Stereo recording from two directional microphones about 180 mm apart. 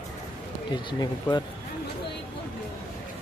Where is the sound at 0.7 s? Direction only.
25° left (ahead or behind).